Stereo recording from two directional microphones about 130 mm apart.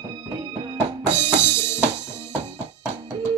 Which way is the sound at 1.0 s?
20° left (ahead or behind).